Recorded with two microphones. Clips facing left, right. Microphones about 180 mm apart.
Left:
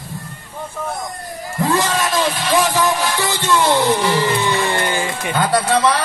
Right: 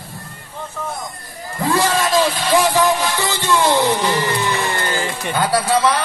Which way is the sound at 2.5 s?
15° right (ahead or behind).